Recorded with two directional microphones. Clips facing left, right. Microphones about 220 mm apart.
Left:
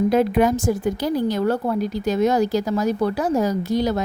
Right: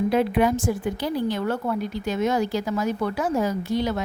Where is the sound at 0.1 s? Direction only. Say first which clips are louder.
Left 3 dB; 40° left (ahead or behind).